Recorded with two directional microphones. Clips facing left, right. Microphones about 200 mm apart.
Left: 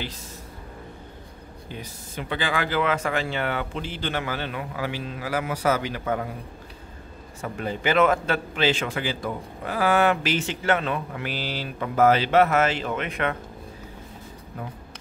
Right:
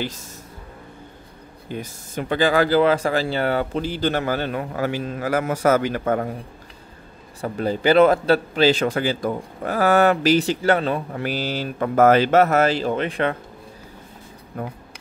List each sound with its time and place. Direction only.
1.7 s speech: 45° right (ahead or behind)
7.4 s a man's voice: 35° right (ahead or behind)
14.6 s speech: 50° right (ahead or behind)